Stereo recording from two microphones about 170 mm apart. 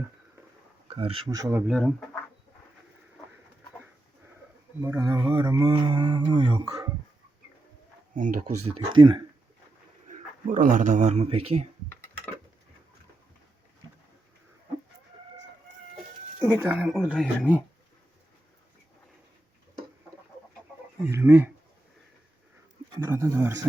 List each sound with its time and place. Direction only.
0.9 s speech: 35° right (ahead or behind)
1.3 s mantra: 20° right (ahead or behind)
1.6 s speech: centre (ahead or behind)
4.8 s mantra: 20° right (ahead or behind)
8.1 s speech: 50° right (ahead or behind)
8.7 s mantra: 30° right (ahead or behind)
10.1 s speech: 50° right (ahead or behind)
16.4 s speech: 15° right (ahead or behind)
21.0 s speech: 15° right (ahead or behind)
23.0 s speech: 15° right (ahead or behind)